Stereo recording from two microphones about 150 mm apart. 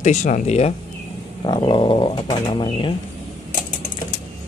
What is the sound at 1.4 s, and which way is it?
Speech, 30° left (ahead or behind).